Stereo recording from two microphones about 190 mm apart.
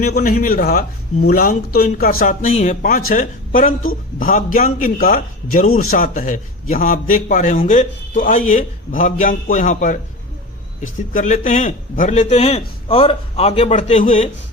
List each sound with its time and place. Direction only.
0.2 s a man's voice: 45° left (ahead or behind)
11.1 s a man's voice: 40° left (ahead or behind)